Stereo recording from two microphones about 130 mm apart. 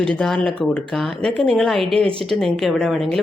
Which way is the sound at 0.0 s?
5° left (ahead or behind).